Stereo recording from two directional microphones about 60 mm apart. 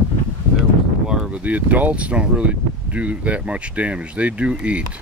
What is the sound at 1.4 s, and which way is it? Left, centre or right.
Speech, right.